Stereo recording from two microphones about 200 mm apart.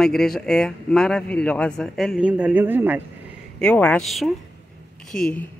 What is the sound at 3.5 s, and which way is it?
Speech, 5° left (ahead or behind).